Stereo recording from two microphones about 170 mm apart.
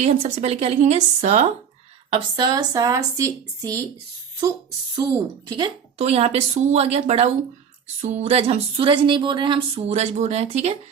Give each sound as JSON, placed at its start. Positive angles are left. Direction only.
{"t": 0.0, "sound": "speech", "side_deg": -40}
{"t": 2.0, "sound": "speech", "side_deg": -30}
{"t": 5.5, "sound": "speech", "side_deg": -25}
{"t": 6.0, "sound": "speech", "side_deg": -40}
{"t": 9.9, "sound": "speech", "side_deg": -40}